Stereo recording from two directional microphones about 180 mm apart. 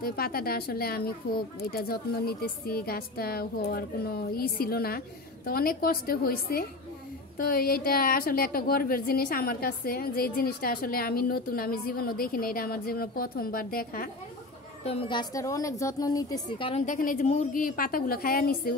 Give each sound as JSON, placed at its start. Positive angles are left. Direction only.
{"t": 0.0, "sound": "a woman's voice", "side_deg": 55}
{"t": 14.9, "sound": "a woman's voice", "side_deg": 30}
{"t": 16.8, "sound": "a woman's voice", "side_deg": 45}